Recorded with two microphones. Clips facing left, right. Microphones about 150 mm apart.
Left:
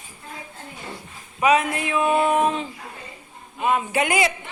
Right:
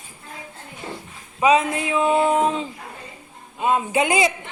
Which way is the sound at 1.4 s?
25° right (ahead or behind).